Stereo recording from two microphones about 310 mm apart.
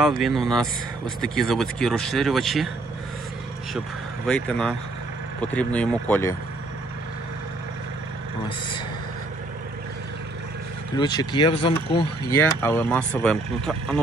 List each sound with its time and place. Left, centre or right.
0.0 s speech: centre
4.3 s speech: centre
11.0 s speech: centre